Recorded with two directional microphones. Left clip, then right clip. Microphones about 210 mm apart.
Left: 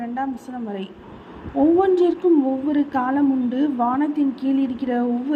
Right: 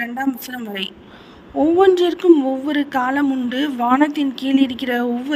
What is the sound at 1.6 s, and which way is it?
A man's voice, 45° right (ahead or behind).